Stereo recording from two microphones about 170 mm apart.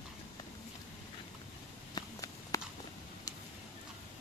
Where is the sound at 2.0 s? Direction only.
20° left (ahead or behind).